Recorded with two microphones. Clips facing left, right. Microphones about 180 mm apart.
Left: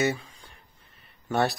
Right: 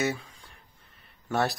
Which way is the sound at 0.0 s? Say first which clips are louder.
Left 3 dB; centre (ahead or behind).